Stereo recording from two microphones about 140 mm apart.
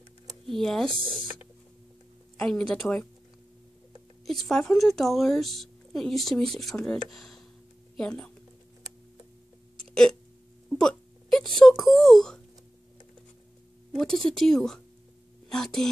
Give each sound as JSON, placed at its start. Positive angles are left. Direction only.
{"t": 0.5, "sound": "speech", "side_deg": 5}
{"t": 0.9, "sound": "speech", "side_deg": -40}
{"t": 2.3, "sound": "speech", "side_deg": 5}
{"t": 4.3, "sound": "speech", "side_deg": 5}
{"t": 10.7, "sound": "wail", "side_deg": 5}
{"t": 13.9, "sound": "a woman's voice", "side_deg": 5}